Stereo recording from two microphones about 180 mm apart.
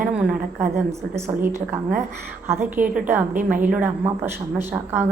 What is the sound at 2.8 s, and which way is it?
Speech, 10° right (ahead or behind).